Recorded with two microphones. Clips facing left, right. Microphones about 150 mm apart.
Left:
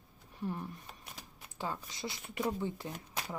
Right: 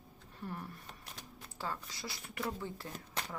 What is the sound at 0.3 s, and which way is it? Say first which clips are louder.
Speech: left 5 dB; 15° left (ahead or behind).